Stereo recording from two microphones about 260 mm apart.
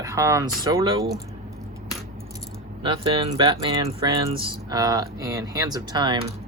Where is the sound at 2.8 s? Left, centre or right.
Centre.